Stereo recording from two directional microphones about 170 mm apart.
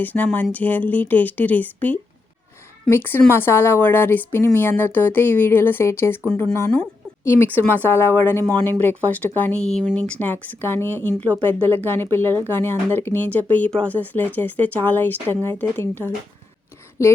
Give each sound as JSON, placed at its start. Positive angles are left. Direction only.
{"t": 0.0, "sound": "speech", "side_deg": 10}